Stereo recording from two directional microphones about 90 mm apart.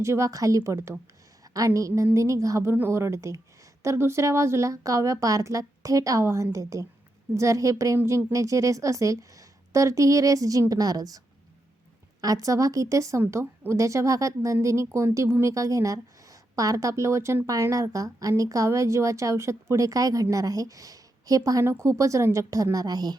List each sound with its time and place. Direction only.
0.0 s speech: 35° right (ahead or behind)
12.2 s a woman's voice: 40° right (ahead or behind)